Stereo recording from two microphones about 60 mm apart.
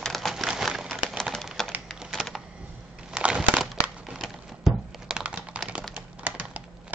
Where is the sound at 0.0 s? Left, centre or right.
Centre.